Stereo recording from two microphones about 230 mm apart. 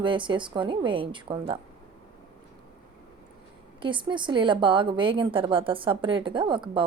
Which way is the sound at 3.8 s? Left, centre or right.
Right.